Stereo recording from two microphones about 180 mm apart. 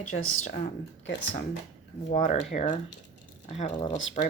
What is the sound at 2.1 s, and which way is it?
Speech, 40° left (ahead or behind).